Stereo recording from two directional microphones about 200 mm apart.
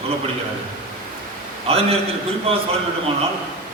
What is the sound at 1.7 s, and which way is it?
Speech, 30° right (ahead or behind).